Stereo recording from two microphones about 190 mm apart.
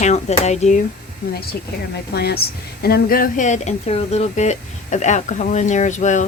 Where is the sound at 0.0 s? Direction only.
35° left (ahead or behind).